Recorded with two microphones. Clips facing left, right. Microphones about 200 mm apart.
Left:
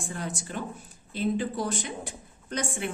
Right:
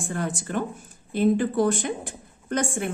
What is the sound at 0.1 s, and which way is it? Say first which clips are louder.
A woman's voice: right 7 dB; 55° right (ahead or behind).